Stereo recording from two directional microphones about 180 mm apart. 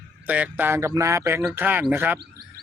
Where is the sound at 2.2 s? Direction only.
60° right (ahead or behind).